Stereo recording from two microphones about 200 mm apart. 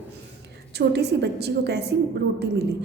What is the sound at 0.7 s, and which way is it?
A woman's voice, 55° right (ahead or behind).